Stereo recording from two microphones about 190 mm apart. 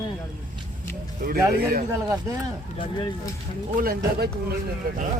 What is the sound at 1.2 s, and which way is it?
Speech, 50° right (ahead or behind).